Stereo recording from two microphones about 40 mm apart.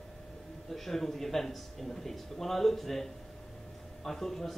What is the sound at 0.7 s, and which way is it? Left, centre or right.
A man's voice, centre.